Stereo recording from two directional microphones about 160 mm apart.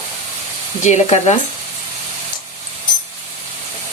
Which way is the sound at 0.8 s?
45° left (ahead or behind).